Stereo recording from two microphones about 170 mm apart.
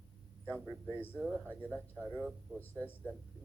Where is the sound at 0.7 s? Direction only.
25° right (ahead or behind).